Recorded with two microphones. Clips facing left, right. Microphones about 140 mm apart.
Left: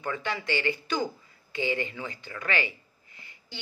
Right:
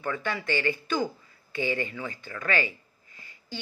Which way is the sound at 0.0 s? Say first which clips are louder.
Right 1 dB; 20° left (ahead or behind).